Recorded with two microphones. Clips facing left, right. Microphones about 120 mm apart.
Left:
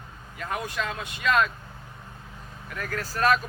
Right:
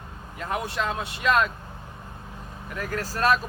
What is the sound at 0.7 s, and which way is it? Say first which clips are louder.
Speech: right 3 dB; 15° right (ahead or behind).